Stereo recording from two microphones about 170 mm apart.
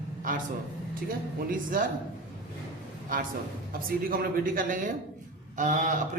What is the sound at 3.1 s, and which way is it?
A man's voice, 50° right (ahead or behind).